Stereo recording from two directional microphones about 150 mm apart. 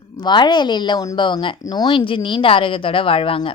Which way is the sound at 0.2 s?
30° left (ahead or behind).